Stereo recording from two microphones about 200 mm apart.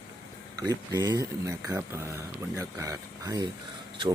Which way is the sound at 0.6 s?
20° right (ahead or behind).